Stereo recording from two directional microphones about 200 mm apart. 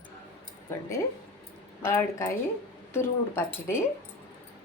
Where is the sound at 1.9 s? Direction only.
15° left (ahead or behind).